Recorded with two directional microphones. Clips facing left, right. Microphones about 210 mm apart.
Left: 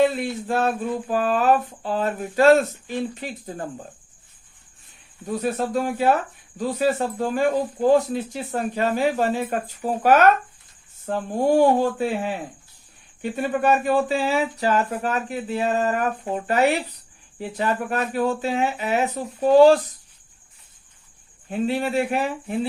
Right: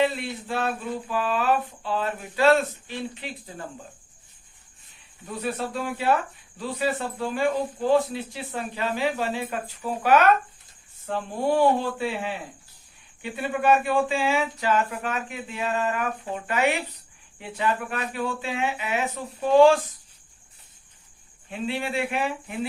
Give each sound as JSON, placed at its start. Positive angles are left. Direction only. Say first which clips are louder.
{"t": 0.0, "sound": "speech", "louder": "left 5 dB", "side_deg": 45}
{"t": 5.2, "sound": "speech", "louder": "left 5 dB", "side_deg": 45}
{"t": 21.5, "sound": "speech", "louder": "left 6 dB", "side_deg": 40}